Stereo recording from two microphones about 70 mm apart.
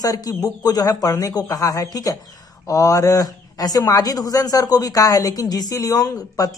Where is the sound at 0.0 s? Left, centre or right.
Left.